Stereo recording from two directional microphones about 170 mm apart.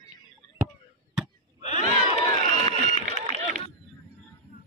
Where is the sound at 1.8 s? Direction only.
45° right (ahead or behind).